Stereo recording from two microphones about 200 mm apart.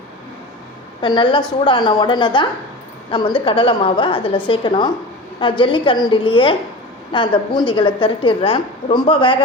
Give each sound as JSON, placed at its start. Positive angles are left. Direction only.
{"t": 1.0, "sound": "a woman's voice", "side_deg": 25}